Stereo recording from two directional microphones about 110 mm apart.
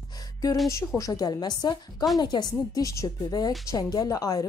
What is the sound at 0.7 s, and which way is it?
A woman's voice, 30° left (ahead or behind).